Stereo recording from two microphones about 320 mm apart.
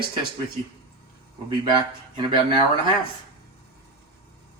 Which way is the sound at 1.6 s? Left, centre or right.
Centre.